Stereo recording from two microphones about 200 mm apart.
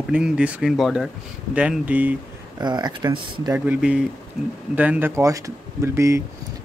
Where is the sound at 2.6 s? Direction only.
20° right (ahead or behind).